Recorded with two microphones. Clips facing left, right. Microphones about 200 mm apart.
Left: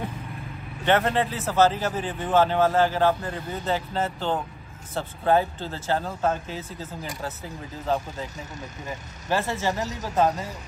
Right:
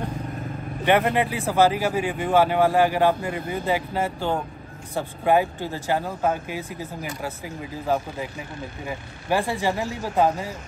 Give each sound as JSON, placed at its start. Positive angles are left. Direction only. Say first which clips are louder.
{"t": 0.8, "sound": "speech", "louder": "right 2 dB", "side_deg": -15}
{"t": 9.8, "sound": "speech", "louder": "right 2 dB", "side_deg": 40}